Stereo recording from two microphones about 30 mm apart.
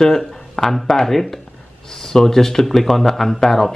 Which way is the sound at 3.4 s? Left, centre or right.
Centre.